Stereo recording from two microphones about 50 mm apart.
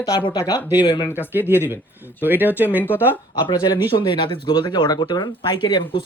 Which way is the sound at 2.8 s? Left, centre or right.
Left.